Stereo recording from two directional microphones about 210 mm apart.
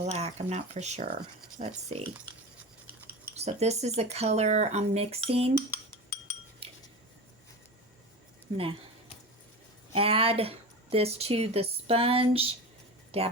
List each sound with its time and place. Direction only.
0.0 s speech: 30° right (ahead or behind)
3.3 s speech: 30° right (ahead or behind)
6.6 s cutlery: 25° right (ahead or behind)
9.9 s speech: 25° right (ahead or behind)